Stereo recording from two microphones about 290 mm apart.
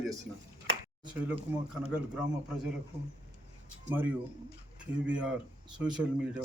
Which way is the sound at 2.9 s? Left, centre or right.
Right.